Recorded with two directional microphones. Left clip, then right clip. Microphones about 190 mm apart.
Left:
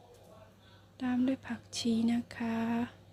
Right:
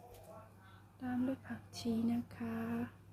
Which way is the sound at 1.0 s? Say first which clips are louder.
Left 7 dB; 40° left (ahead or behind).